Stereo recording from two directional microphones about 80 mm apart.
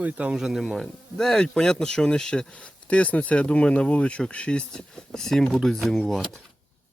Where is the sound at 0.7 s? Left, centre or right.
Centre.